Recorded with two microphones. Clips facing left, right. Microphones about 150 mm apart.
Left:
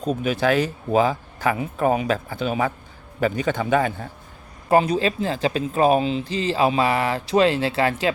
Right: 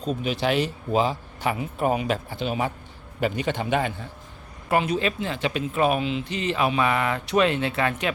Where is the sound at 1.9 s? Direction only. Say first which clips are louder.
Left 3 dB; 40° left (ahead or behind).